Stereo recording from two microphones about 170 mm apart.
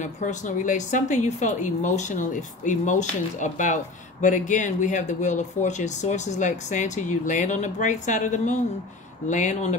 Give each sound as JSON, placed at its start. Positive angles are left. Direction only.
{"t": 0.0, "sound": "speech", "side_deg": 50}